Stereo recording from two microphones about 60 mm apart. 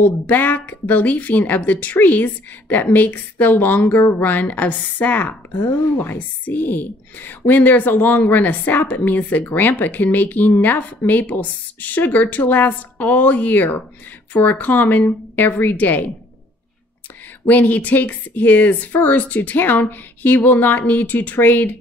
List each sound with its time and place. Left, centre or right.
0.0 s a woman's voice: left
17.5 s a woman's voice: left